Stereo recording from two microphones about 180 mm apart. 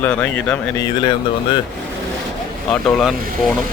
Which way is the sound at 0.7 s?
25° left (ahead or behind).